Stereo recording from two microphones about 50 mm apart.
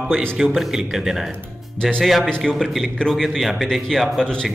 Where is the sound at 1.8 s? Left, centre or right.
Centre.